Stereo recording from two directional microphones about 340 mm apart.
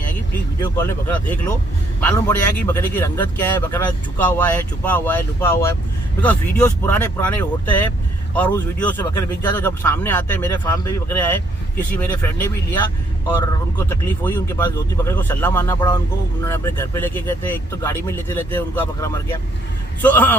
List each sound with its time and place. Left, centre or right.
0.6 s a man's voice: centre